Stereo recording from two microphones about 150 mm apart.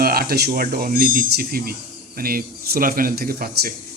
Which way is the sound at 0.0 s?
85° right.